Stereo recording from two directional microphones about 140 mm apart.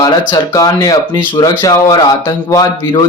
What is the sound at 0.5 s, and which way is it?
A man's voice, 25° left (ahead or behind).